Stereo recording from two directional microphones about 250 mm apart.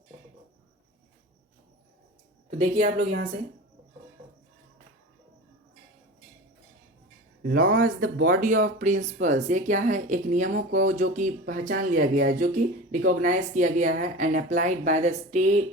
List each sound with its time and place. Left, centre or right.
2.5 s speech: right
7.4 s speech: right